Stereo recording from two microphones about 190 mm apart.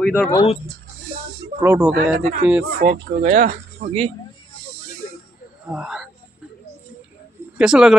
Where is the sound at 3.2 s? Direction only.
40° right (ahead or behind).